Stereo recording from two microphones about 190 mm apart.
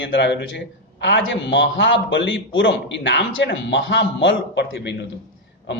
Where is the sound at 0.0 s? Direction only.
70° left (ahead or behind).